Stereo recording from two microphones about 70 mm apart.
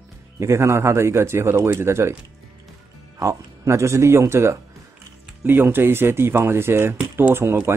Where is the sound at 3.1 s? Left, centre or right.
Right.